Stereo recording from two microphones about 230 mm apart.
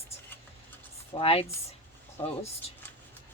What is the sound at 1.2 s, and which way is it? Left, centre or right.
Speech, left.